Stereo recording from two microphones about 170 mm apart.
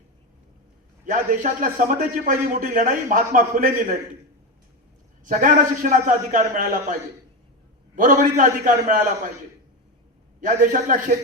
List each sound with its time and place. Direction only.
1.0 s a man's voice: 50° right (ahead or behind)
5.2 s a man's voice: 50° right (ahead or behind)
7.9 s a man's voice: 50° right (ahead or behind)
10.4 s a man's voice: 50° right (ahead or behind)